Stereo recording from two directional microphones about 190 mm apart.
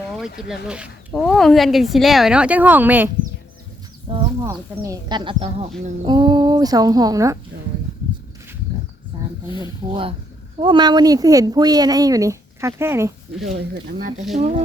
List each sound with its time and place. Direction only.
0.4 s speech: 5° right (ahead or behind)
4.1 s speech: 30° right (ahead or behind)
4.4 s speech: 15° right (ahead or behind)
9.1 s wild animals: 25° right (ahead or behind)
9.5 s speech: 25° left (ahead or behind)
9.9 s speech: 30° right (ahead or behind)
14.3 s speech: 35° right (ahead or behind)